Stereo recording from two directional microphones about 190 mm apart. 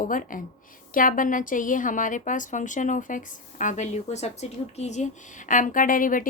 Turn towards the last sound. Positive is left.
turn(degrees=45)  # may be behind; listen again after turning